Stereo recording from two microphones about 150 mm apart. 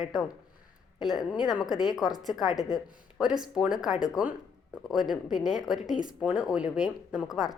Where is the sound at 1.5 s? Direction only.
Centre (ahead or behind).